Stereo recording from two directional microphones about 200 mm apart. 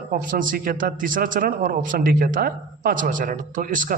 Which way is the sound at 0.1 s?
40° right (ahead or behind).